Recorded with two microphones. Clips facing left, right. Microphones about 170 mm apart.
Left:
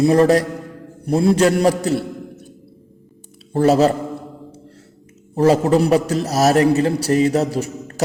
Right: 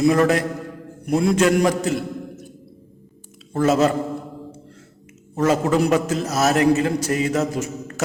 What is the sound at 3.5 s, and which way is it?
Speech, 35° left (ahead or behind).